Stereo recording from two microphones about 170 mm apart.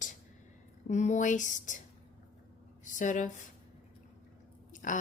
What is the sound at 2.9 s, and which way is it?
Speech, 50° left (ahead or behind).